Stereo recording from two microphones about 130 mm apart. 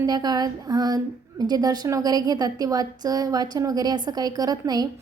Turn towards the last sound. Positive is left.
turn(degrees=-30)  # may be behind; listen again after turning